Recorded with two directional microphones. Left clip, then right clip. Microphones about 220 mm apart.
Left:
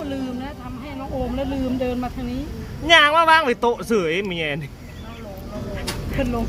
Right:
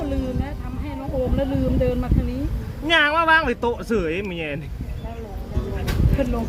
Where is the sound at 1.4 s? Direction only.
55° left (ahead or behind).